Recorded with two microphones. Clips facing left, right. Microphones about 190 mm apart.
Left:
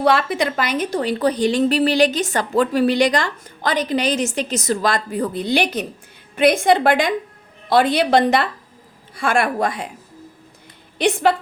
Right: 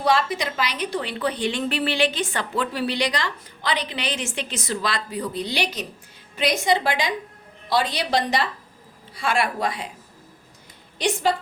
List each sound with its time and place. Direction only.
0.0 s a woman's voice: 60° left (ahead or behind)
10.9 s a woman's voice: 60° left (ahead or behind)